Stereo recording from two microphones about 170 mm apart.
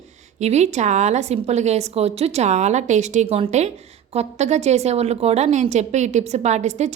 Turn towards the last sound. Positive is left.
turn(degrees=-40)  # may be behind; listen again after turning